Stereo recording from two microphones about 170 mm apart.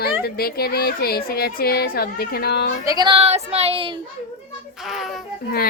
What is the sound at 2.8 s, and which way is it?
Speech, 25° right (ahead or behind).